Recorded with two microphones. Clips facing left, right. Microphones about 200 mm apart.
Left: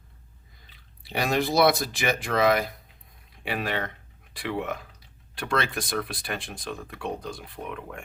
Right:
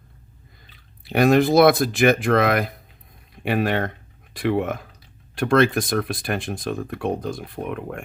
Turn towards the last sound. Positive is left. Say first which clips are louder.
# right 7 dB
turn(degrees=-55)  # may be behind; listen again after turning